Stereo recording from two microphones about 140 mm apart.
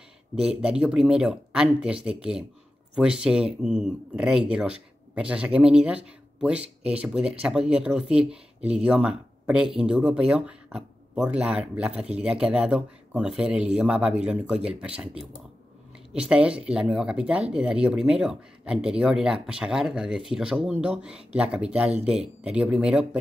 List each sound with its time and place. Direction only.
0.4 s speech: 5° right (ahead or behind)